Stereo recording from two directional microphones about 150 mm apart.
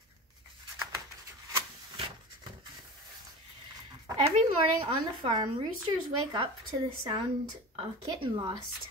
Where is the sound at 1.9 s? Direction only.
30° right (ahead or behind).